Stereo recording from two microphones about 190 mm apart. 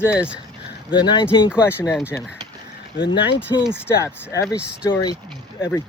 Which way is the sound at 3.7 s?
10° left (ahead or behind).